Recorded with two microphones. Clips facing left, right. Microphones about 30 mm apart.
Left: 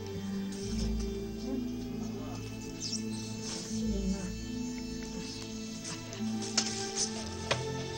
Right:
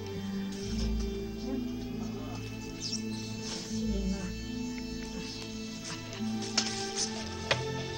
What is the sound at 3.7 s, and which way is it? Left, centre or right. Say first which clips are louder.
Music: even; centre.